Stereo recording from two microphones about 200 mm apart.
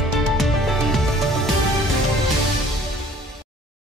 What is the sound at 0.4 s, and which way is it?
Music, centre (ahead or behind).